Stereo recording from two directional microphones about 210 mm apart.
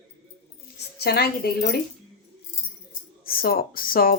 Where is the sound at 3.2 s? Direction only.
45° left (ahead or behind).